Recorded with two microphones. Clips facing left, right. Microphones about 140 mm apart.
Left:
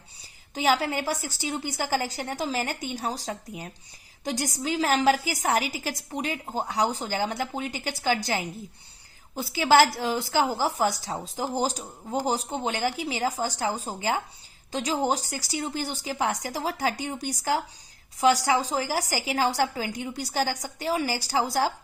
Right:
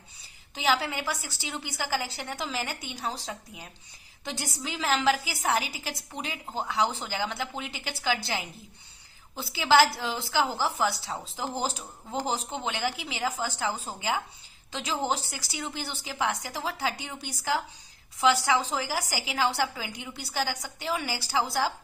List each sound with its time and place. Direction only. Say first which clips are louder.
0.5 s a woman's voice: left 3 dB; 45° left (ahead or behind)
3.0 s speech: left 3 dB; 30° left (ahead or behind)
4.2 s a woman's voice: left 6 dB; 40° left (ahead or behind)